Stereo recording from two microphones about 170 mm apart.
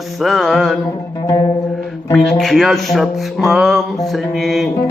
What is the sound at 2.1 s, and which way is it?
Music, centre (ahead or behind).